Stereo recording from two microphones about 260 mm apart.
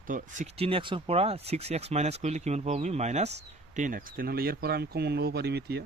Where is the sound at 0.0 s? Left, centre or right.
Right.